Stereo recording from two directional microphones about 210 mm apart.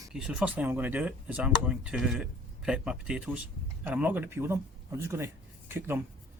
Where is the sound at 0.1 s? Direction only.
5° right (ahead or behind).